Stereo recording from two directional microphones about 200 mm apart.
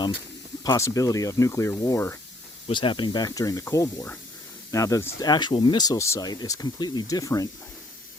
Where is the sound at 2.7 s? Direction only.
25° left (ahead or behind).